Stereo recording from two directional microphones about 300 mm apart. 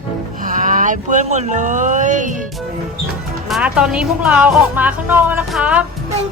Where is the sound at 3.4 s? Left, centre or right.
Centre.